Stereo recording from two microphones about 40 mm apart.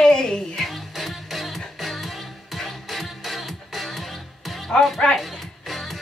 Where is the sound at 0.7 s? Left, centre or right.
Centre.